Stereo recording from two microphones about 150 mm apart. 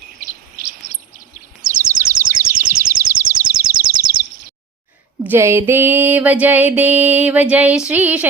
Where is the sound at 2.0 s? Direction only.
70° right (ahead or behind).